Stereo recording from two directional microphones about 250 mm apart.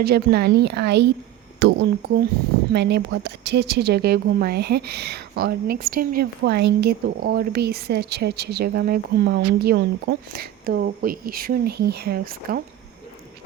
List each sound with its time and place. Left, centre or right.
0.0 s speech: right
1.5 s a sound: right
2.7 s speech: right